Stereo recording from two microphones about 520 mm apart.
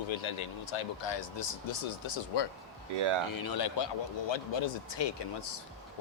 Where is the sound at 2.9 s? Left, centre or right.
Right.